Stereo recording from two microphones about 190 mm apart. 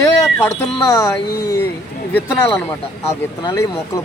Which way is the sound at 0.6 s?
15° left (ahead or behind).